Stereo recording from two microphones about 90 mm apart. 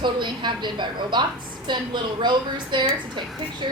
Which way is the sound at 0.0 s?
60° right (ahead or behind).